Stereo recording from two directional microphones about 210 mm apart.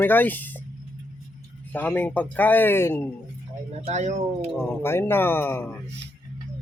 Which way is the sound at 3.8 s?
35° right (ahead or behind).